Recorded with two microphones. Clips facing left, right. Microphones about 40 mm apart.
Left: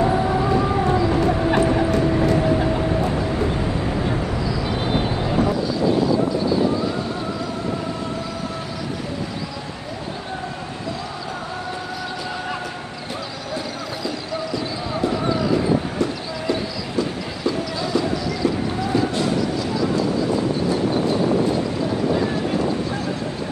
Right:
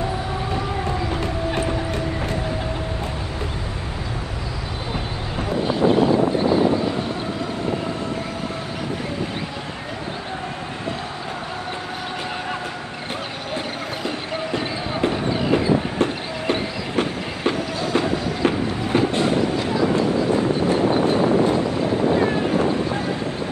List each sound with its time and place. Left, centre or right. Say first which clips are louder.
5.6 s vehicle: right 2 dB; right
14.0 s a sound: left 1 dB; right
16.0 s train: right 1 dB; right